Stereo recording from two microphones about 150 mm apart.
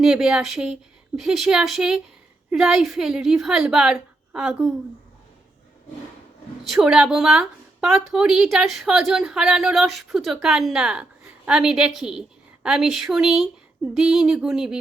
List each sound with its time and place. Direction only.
0.0 s a woman's voice: 5° right (ahead or behind)
6.7 s a woman's voice: 5° right (ahead or behind)